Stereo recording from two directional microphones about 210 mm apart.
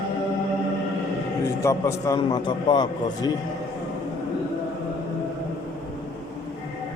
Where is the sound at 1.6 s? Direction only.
15° left (ahead or behind).